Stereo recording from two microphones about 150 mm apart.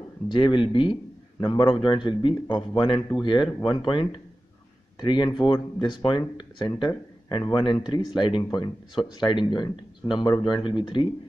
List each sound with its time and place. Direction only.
0.3 s speech: 35° left (ahead or behind)